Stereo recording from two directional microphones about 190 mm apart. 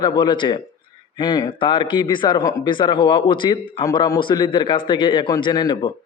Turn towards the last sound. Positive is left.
turn(degrees=20)  # may be behind; listen again after turning